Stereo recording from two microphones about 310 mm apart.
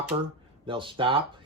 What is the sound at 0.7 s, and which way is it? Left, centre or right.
Speech, centre.